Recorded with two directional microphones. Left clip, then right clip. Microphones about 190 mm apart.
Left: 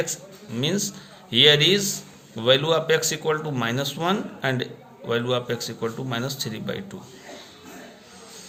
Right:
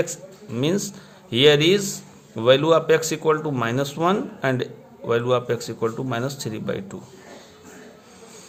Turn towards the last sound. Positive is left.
turn(degrees=-40)  # may be behind; listen again after turning